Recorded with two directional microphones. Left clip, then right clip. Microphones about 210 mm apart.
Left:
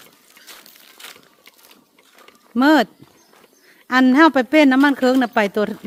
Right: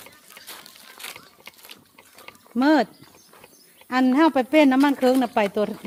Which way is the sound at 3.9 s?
30° left (ahead or behind).